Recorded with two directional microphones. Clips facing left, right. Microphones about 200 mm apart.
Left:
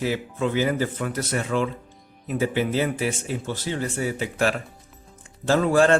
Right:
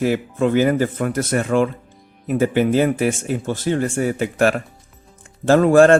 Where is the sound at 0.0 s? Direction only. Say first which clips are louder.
Right 6 dB; 55° right (ahead or behind).